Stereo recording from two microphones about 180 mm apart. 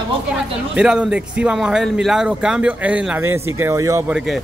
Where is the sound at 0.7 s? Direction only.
5° right (ahead or behind).